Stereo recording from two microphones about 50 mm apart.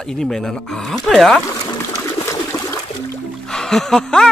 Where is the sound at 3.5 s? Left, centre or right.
Centre.